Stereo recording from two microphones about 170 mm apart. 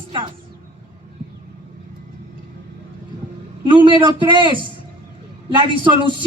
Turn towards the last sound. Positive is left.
turn(degrees=-30)  # may be behind; listen again after turning